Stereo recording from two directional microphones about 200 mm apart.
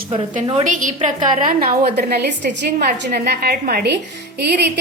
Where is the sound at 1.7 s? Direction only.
50° right (ahead or behind).